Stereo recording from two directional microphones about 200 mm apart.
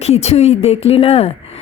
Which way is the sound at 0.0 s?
30° left (ahead or behind).